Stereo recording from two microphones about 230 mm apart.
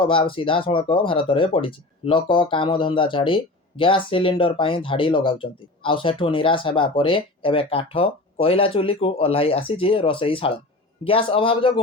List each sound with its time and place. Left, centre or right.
0.0 s speech: left